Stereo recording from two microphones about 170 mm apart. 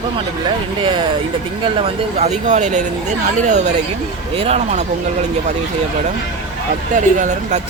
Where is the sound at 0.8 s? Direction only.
30° right (ahead or behind).